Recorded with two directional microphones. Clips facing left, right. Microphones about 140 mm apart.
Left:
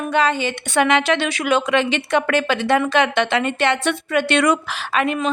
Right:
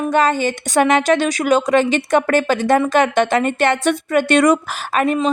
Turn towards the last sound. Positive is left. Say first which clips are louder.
# right 3 dB
turn(degrees=-45)  # may be behind; listen again after turning